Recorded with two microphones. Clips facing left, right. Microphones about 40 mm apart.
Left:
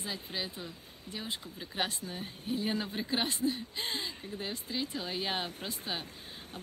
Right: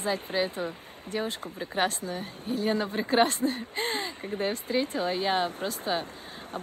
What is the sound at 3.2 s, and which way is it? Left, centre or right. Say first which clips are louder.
Speech: right 7 dB; right.